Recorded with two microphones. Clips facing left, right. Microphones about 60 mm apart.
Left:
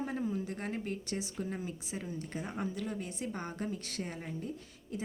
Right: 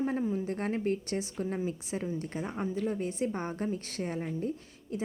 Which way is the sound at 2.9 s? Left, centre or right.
Right.